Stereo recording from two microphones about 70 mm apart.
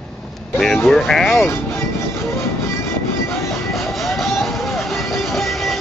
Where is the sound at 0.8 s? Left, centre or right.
Centre.